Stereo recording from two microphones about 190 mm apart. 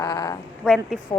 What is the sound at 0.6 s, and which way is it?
Speech, centre (ahead or behind).